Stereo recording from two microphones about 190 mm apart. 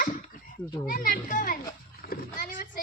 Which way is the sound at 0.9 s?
50° left (ahead or behind).